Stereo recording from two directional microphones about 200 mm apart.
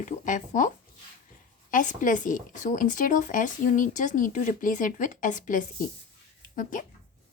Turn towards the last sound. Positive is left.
turn(degrees=40)  # may be behind; listen again after turning